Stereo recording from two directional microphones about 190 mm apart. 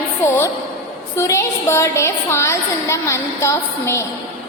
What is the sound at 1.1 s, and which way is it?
A woman's voice, 15° left (ahead or behind).